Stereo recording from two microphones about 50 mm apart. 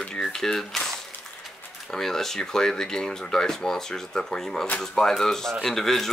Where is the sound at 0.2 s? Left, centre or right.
Centre.